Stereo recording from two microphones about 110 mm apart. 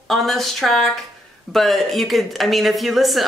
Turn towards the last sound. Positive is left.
turn(degrees=0)  # may be behind; listen again after turning